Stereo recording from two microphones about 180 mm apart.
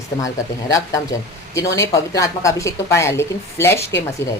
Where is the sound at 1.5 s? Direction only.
15° left (ahead or behind).